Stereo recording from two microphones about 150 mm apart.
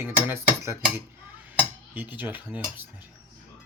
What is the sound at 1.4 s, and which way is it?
Speech, 10° right (ahead or behind).